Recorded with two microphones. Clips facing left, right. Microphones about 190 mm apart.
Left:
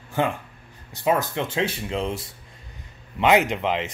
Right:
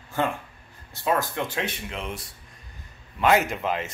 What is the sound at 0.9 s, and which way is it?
Speech, 20° left (ahead or behind).